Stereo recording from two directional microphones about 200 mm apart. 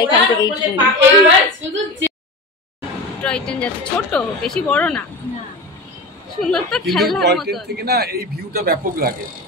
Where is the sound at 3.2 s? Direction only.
5° left (ahead or behind).